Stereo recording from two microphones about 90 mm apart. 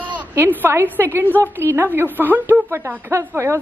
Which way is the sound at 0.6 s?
20° right (ahead or behind).